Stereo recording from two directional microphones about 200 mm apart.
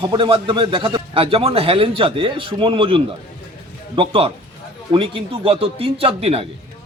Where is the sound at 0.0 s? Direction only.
25° right (ahead or behind).